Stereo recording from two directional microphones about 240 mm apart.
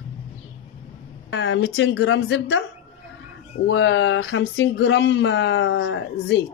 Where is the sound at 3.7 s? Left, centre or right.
Left.